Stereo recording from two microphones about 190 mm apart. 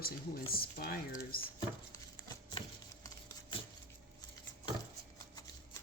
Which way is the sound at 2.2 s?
20° left (ahead or behind).